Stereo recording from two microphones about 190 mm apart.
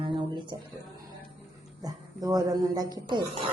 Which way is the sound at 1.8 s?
20° right (ahead or behind).